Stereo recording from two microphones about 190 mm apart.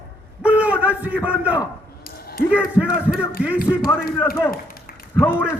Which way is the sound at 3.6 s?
50° left (ahead or behind).